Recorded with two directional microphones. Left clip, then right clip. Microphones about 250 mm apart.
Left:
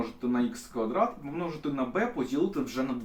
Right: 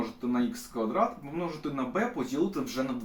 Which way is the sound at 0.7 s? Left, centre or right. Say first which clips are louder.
Even; centre.